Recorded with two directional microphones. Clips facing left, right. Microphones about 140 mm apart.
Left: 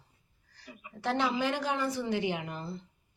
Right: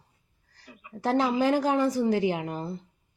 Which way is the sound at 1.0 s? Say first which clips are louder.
Right 6 dB; 40° right (ahead or behind).